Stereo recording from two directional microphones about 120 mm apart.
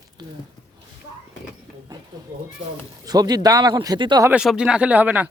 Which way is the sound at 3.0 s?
35° right (ahead or behind).